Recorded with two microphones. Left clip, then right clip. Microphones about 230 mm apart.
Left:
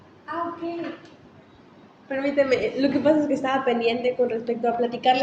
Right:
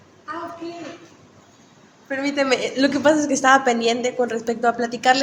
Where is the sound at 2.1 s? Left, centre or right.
Right.